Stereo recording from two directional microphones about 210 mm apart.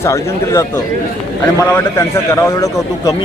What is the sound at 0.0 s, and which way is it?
A man's voice, 15° left (ahead or behind).